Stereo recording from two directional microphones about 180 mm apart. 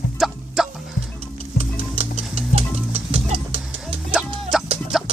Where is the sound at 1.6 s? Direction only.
35° right (ahead or behind).